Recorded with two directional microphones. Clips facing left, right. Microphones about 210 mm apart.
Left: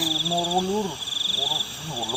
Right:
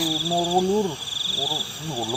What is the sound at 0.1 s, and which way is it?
Speech, 15° right (ahead or behind).